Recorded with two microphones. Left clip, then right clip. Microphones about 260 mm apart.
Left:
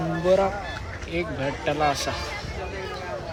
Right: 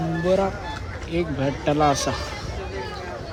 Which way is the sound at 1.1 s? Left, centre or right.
Centre.